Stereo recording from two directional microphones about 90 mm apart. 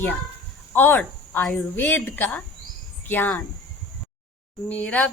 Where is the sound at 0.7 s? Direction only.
20° left (ahead or behind).